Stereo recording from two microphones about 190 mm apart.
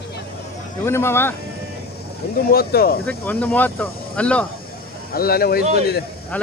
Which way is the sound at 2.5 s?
55° left (ahead or behind).